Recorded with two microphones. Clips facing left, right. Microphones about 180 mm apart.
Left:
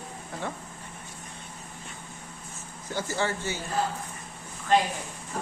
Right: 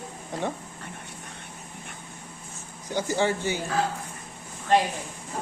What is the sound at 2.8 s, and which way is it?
Speech, 15° right (ahead or behind).